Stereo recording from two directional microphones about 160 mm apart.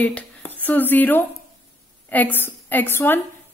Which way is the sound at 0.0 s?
10° left (ahead or behind).